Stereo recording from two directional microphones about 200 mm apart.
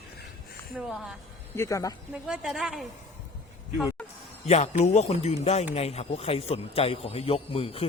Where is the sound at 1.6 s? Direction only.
15° left (ahead or behind).